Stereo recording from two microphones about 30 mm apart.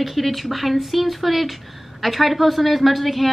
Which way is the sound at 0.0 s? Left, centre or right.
Centre.